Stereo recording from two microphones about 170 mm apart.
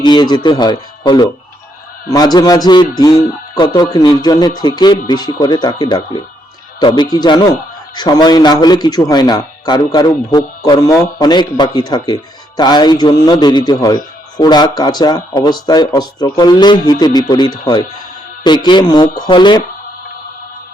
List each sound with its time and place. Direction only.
0.0 s a man's voice: 25° left (ahead or behind)